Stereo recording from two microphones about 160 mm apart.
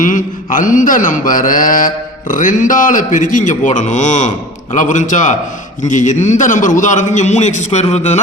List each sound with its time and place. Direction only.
0.0 s mantra: 55° left (ahead or behind)
4.7 s a man's voice: 50° left (ahead or behind)